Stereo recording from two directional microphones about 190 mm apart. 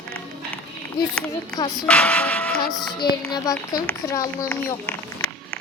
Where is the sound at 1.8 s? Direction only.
5° left (ahead or behind).